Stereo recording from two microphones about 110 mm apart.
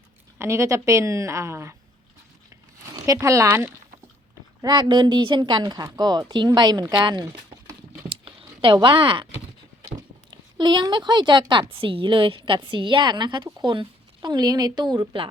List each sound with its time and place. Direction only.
0.3 s a woman's voice: 25° right (ahead or behind)
2.9 s speech: 35° right (ahead or behind)
4.6 s a woman's voice: 40° right (ahead or behind)
8.1 s a sound: 50° right (ahead or behind)
10.6 s speech: 45° right (ahead or behind)